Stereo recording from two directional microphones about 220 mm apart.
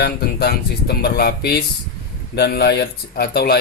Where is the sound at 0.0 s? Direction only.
45° left (ahead or behind).